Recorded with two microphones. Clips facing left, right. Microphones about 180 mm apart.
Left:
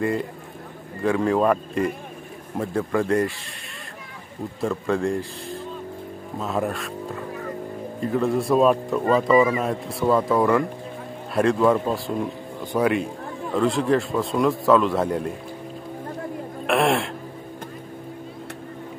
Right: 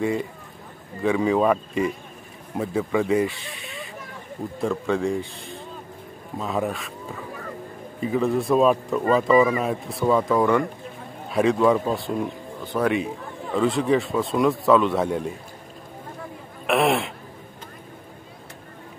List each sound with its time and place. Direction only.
0.0 s speech: centre (ahead or behind)
8.0 s speech: centre (ahead or behind)
16.6 s speech: centre (ahead or behind)